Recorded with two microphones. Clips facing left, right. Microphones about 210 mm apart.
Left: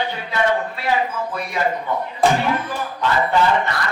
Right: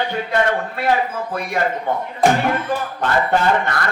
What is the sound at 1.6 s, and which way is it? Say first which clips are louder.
Speech: right 1 dB; 55° right (ahead or behind).